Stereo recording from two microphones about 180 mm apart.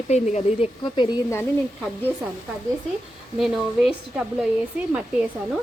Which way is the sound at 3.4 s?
Centre (ahead or behind).